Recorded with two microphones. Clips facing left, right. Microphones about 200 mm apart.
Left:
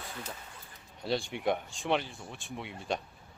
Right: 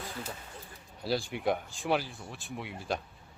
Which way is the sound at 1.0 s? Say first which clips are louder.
Even; centre (ahead or behind).